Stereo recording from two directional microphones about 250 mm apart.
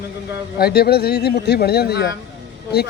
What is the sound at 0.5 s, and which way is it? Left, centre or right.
Speech, left.